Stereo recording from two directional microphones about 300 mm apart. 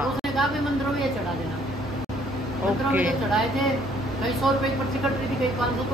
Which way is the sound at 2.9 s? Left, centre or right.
Centre.